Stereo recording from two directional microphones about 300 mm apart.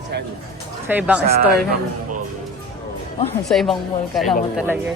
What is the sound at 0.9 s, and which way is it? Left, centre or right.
Speech, centre.